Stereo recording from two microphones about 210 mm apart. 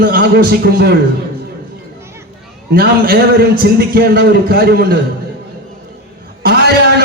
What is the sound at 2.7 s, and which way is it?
A man's voice, 45° right (ahead or behind).